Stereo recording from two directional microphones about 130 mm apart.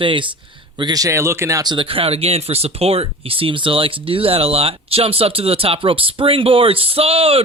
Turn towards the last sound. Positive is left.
turn(degrees=-50)  # may be behind; listen again after turning